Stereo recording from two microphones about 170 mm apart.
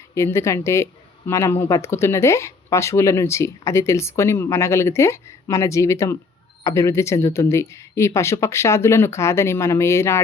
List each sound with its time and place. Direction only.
0.1 s speech: 15° left (ahead or behind)